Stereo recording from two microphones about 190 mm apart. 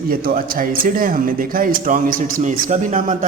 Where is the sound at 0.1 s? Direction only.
50° right (ahead or behind).